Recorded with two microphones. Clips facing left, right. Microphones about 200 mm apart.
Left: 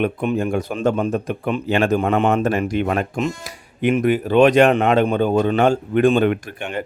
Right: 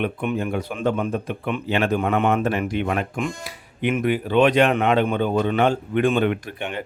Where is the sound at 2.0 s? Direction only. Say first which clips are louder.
Left 3 dB; 30° left (ahead or behind).